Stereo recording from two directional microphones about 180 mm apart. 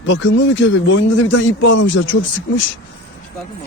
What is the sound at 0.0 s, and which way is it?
Speech, 90° left.